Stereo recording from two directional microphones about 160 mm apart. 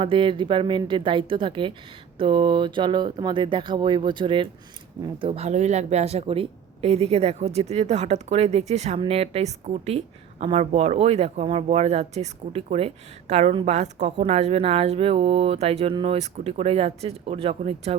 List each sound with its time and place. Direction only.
0.0 s speech: 30° right (ahead or behind)